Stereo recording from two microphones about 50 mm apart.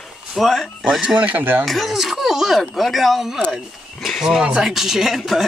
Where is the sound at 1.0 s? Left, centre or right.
Right.